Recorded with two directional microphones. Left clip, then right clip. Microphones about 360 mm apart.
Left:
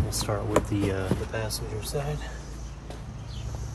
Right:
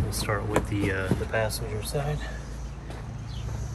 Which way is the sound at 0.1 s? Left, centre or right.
Centre.